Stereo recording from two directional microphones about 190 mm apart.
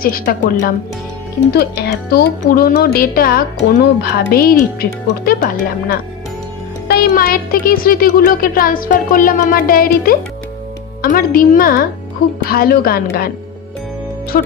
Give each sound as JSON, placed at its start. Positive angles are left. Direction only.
{"t": 0.0, "sound": "speech", "side_deg": 50}
{"t": 14.3, "sound": "speech", "side_deg": 50}